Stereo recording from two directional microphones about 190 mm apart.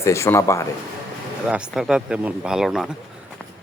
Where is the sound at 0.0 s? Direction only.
15° left (ahead or behind).